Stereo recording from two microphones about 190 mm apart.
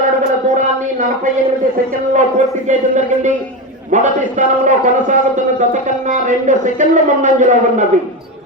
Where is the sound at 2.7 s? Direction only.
40° right (ahead or behind).